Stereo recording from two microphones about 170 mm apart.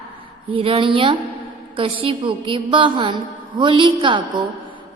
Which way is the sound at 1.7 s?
30° right (ahead or behind).